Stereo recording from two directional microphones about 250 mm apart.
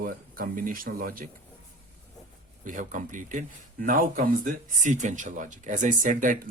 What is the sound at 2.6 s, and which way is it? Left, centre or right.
Speech, right.